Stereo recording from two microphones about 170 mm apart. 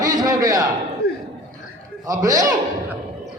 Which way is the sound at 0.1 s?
20° right (ahead or behind).